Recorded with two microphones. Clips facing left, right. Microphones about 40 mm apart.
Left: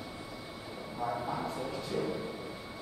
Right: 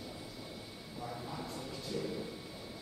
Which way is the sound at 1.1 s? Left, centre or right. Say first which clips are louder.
Left 9 dB; left.